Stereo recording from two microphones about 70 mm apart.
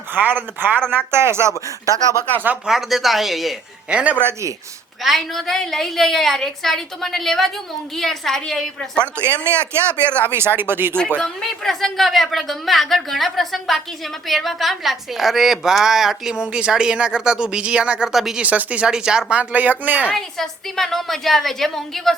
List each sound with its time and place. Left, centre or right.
0.1 s speech: right
2.6 s a woman's voice: centre
3.8 s speech: centre
4.2 s speech: right
5.0 s a woman's voice: centre
9.1 s speech: right
9.6 s speech: centre
10.2 s speech: right
11.2 s a woman's voice: centre
18.4 s speech: right
20.1 s a woman's voice: centre